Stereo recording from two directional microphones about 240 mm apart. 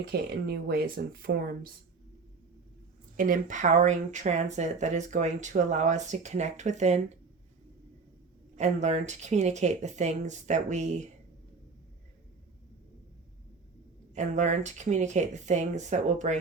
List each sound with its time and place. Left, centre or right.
0.0 s speech: right
3.2 s speech: right
8.5 s speech: right
14.2 s speech: right